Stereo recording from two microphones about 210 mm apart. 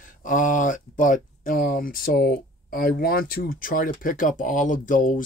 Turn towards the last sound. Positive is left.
turn(degrees=40)  # may be behind; listen again after turning